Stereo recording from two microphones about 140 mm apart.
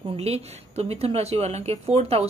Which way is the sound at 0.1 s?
45° right (ahead or behind).